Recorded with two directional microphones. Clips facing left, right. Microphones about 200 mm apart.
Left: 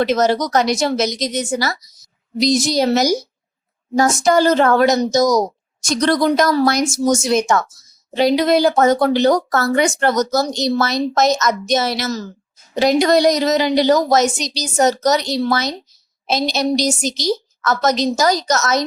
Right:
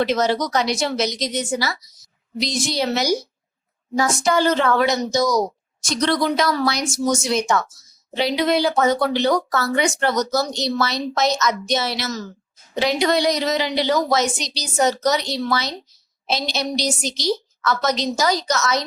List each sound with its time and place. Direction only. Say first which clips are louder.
0.0 s speech: left 3 dB; 45° left (ahead or behind)